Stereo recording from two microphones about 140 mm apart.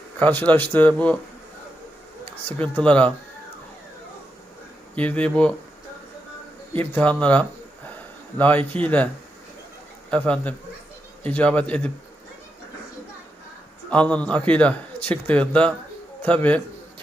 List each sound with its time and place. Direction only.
0.2 s a man's voice: 10° left (ahead or behind)
2.2 s speech: 10° left (ahead or behind)
4.9 s a man's voice: 10° left (ahead or behind)
6.7 s a man's voice: 10° left (ahead or behind)
10.1 s a man's voice: 10° left (ahead or behind)
13.9 s a man's voice: 10° left (ahead or behind)